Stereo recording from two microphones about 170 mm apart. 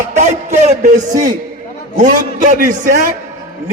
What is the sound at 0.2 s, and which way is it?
A man's voice, 40° right (ahead or behind).